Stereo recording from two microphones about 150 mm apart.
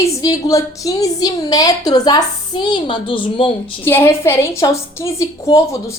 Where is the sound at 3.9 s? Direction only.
15° left (ahead or behind).